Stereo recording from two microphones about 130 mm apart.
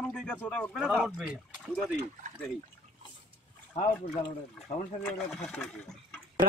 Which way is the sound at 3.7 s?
55° left (ahead or behind).